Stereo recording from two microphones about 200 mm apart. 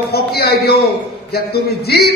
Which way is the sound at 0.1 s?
50° left (ahead or behind).